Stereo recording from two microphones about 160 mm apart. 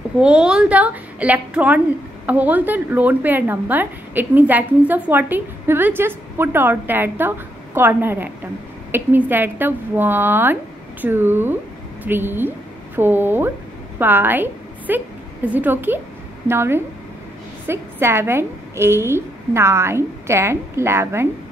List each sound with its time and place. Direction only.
0.2 s a woman's voice: 5° right (ahead or behind)